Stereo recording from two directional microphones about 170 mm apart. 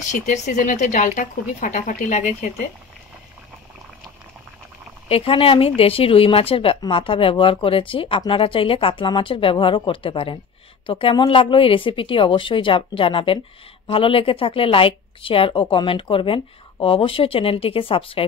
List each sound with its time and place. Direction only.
0.1 s speech: 45° left (ahead or behind)
5.0 s speech: 35° left (ahead or behind)